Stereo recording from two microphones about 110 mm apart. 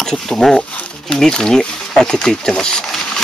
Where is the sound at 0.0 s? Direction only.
5° left (ahead or behind).